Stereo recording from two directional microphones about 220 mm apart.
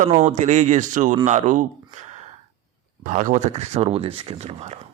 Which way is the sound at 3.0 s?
35° right (ahead or behind).